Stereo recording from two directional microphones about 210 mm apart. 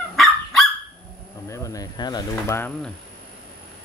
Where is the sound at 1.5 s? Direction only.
15° left (ahead or behind).